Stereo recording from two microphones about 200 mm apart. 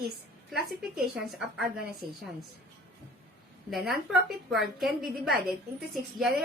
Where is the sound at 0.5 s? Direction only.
Centre (ahead or behind).